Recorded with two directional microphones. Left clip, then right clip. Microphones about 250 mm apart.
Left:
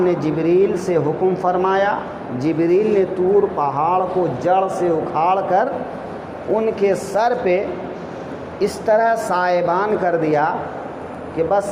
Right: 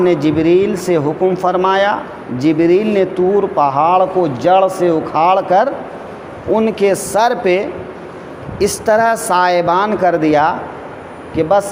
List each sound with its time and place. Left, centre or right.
0.0 s a woman's voice: right